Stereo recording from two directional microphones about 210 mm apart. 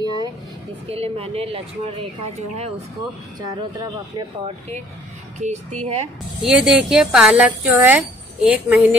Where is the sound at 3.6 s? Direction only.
20° right (ahead or behind).